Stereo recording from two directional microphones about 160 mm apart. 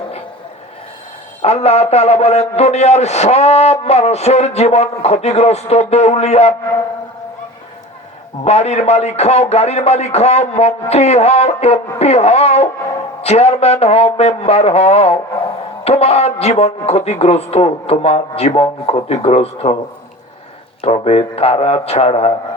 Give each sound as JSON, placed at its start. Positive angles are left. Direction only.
{"t": 1.4, "sound": "a man's voice", "side_deg": 40}
{"t": 8.4, "sound": "a man's voice", "side_deg": 40}
{"t": 20.8, "sound": "a man's voice", "side_deg": 40}